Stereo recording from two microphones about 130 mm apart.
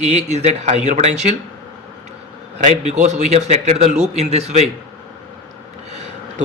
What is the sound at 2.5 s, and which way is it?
Speech, 60° right (ahead or behind).